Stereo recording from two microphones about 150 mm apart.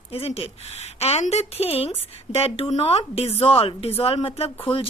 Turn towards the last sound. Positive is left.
turn(degrees=35)  # may be behind; listen again after turning